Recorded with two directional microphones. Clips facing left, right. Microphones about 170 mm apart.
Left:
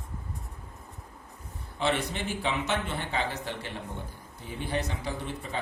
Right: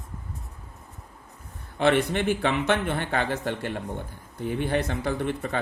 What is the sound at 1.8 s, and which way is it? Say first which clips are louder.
Speech: right 7 dB; 60° right (ahead or behind).